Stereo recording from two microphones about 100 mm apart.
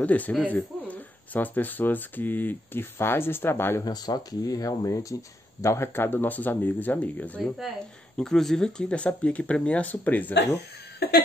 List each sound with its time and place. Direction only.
0.0 s speech: 15° left (ahead or behind)
3.8 s speech: 40° left (ahead or behind); by 7.3 s 15° left (ahead or behind)
8.2 s speech: 5° left (ahead or behind)